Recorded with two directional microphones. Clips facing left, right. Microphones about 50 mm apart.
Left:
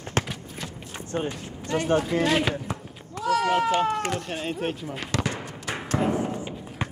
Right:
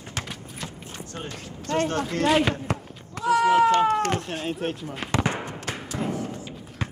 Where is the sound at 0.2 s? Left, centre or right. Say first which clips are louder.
Left 7 dB; left.